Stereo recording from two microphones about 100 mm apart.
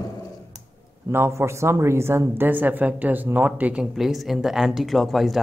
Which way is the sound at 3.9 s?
Centre (ahead or behind).